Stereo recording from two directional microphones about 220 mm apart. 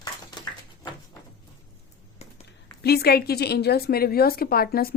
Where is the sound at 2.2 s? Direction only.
30° left (ahead or behind).